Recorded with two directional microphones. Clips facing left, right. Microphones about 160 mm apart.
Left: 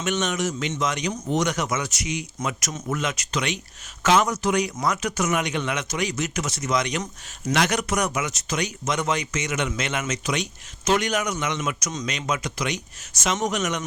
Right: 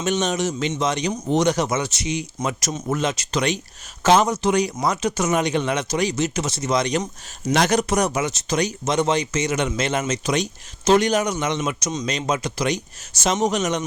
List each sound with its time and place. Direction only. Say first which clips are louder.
0.0 s speech: right 3 dB; 35° right (ahead or behind)